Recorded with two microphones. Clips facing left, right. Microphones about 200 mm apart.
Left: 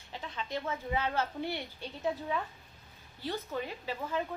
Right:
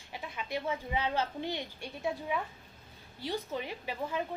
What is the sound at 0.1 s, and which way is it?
A woman's voice, 10° right (ahead or behind).